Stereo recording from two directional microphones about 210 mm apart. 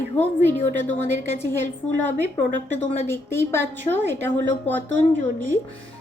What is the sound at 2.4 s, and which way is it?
Speech, 60° right (ahead or behind).